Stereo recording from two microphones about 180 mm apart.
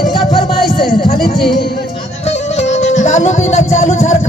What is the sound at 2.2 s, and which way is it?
Music, 40° left (ahead or behind).